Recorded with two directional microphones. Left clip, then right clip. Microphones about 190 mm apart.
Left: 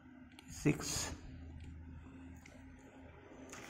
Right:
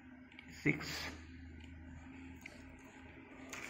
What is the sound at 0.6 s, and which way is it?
Speech, 40° left (ahead or behind).